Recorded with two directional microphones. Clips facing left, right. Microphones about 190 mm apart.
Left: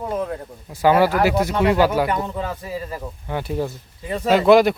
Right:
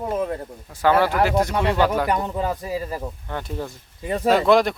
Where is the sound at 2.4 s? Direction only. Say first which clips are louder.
Right 3 dB; 35° right (ahead or behind).